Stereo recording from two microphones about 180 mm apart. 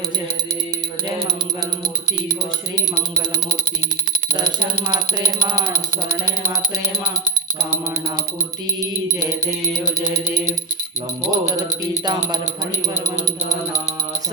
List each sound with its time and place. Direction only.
4.9 s music: 20° right (ahead or behind)
10.2 s music: 15° right (ahead or behind)